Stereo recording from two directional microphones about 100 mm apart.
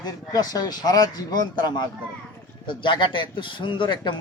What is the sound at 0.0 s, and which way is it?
Speech, 40° left (ahead or behind).